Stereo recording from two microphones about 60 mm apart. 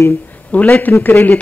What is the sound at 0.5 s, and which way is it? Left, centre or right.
Speech, left.